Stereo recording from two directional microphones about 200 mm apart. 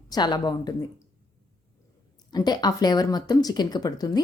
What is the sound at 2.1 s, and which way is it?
A woman's voice, 20° left (ahead or behind).